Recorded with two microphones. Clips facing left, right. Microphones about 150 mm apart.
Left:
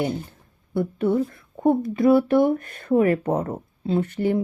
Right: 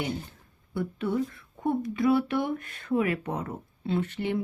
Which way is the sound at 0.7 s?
45° left (ahead or behind).